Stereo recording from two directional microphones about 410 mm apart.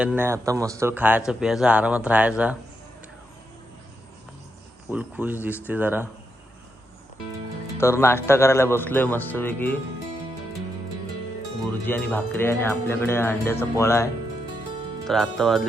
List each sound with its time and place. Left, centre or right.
0.0 s speech: centre
4.9 s speech: centre
7.8 s speech: centre
11.9 s speech: centre